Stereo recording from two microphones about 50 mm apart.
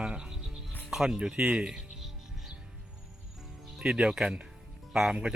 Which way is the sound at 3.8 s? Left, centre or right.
Centre.